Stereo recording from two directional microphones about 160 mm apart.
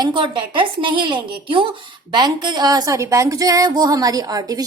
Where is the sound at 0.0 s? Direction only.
30° right (ahead or behind).